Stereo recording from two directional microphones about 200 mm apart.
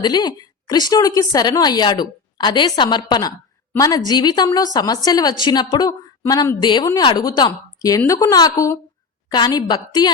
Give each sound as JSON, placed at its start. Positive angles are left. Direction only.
{"t": 0.0, "sound": "a woman's voice", "side_deg": 20}